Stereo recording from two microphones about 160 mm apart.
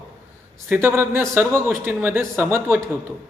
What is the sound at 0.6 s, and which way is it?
A man's voice, 15° right (ahead or behind).